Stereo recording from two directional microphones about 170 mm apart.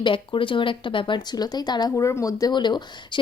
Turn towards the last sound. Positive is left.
turn(degrees=25)  # may be behind; listen again after turning